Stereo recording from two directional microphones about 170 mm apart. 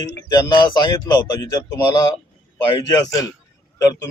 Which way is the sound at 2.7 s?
20° left (ahead or behind).